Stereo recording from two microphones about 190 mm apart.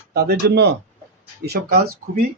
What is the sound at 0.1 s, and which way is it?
Speech, 60° right (ahead or behind).